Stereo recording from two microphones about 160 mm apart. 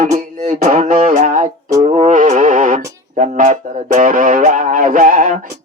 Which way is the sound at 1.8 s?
45° right (ahead or behind).